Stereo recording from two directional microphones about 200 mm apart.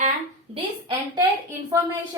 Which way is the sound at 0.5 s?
25° right (ahead or behind).